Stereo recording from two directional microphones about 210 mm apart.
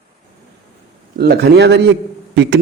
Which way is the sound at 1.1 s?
50° right (ahead or behind).